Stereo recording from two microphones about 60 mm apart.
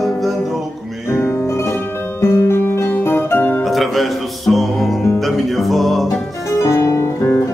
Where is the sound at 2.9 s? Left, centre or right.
Left.